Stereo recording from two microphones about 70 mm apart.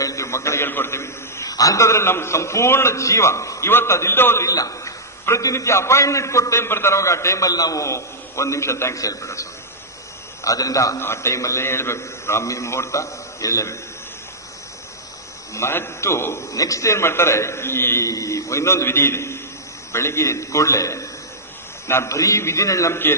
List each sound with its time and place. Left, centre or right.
0.0 s a sound: left
0.7 s a man's voice: left
1.5 s a man's voice: left
4.5 s a man's voice: left
7.8 s a man's voice: left
9.0 s a man's voice: left
11.0 s a man's voice: left
15.5 s a man's voice: left
16.5 s a man's voice: left
18.0 s a man's voice: left